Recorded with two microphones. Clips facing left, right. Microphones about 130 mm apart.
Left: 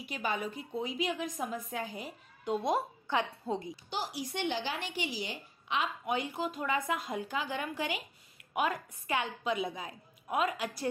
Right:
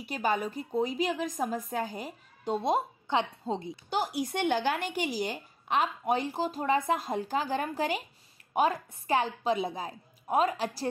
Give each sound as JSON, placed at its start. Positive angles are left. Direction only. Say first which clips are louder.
{"t": 0.0, "sound": "a woman's voice", "louder": "right 5 dB", "side_deg": -40}
{"t": 3.7, "sound": "a woman's voice", "louder": "right 7 dB", "side_deg": -50}